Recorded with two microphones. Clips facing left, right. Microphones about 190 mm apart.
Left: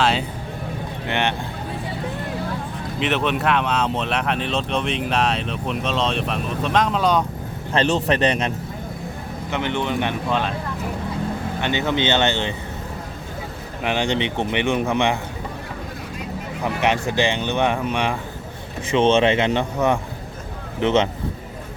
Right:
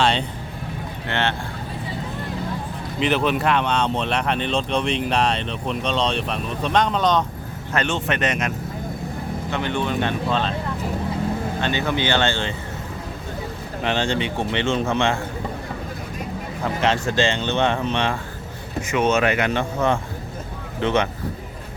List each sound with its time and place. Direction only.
0.0 s music: 5° left (ahead or behind)
1.0 s speech: 15° left (ahead or behind)
3.0 s speech: centre (ahead or behind)
7.7 s speech: 30° left (ahead or behind)
9.5 s speech: 20° left (ahead or behind)
11.6 s speech: 20° left (ahead or behind)
13.8 s speech: 15° left (ahead or behind)
16.6 s speech: 15° left (ahead or behind)
18.9 s speech: 30° left (ahead or behind)